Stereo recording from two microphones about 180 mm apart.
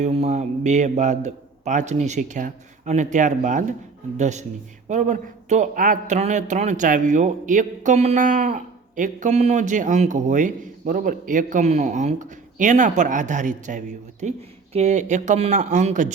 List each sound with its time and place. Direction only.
0.0 s a man's voice: 35° right (ahead or behind)